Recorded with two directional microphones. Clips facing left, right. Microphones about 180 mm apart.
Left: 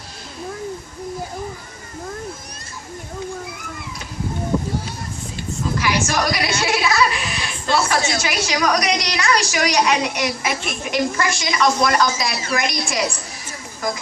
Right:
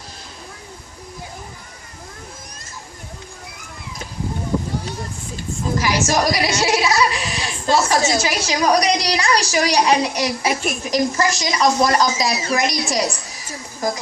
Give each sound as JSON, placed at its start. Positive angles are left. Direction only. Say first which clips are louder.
{"t": 5.7, "sound": "a woman's voice", "louder": "right 3 dB", "side_deg": -40}
{"t": 6.7, "sound": "a sound", "louder": "right 1 dB", "side_deg": -20}
{"t": 7.4, "sound": "a woman's voice", "louder": "right 2 dB", "side_deg": -40}